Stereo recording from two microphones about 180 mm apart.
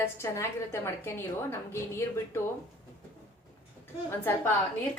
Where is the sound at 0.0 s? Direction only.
15° left (ahead or behind).